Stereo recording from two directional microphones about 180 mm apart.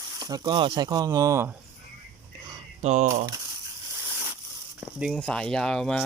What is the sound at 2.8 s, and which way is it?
Speech, 40° right (ahead or behind).